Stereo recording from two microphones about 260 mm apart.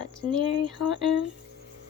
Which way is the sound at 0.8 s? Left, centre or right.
Left.